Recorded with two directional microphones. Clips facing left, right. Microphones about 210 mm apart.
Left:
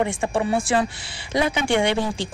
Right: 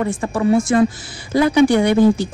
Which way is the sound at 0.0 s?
25° left (ahead or behind).